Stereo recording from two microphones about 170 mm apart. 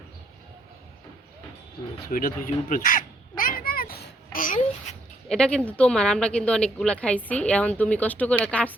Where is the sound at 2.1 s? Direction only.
55° left (ahead or behind).